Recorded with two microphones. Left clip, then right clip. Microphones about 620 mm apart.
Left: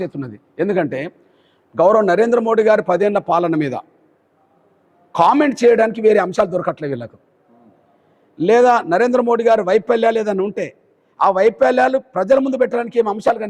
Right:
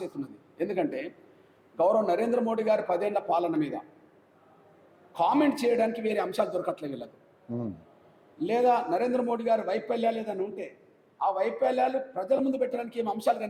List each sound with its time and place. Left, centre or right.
0.0 s a man's voice: left
5.1 s a man's voice: left
8.4 s a man's voice: left